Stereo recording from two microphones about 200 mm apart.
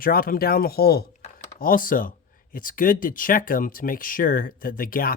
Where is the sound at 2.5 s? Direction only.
45° left (ahead or behind).